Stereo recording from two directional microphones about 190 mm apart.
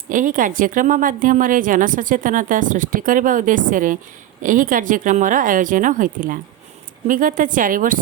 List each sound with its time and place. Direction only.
0.1 s a woman's voice: 45° right (ahead or behind)